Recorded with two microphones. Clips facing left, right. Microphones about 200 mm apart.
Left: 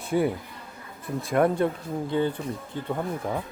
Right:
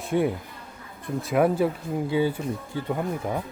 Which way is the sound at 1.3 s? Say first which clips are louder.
Right 1 dB; 5° right (ahead or behind).